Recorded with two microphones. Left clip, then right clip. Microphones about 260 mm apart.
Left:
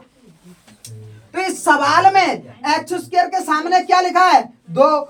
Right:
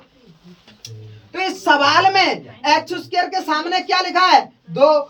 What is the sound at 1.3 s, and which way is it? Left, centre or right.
A woman's voice, centre.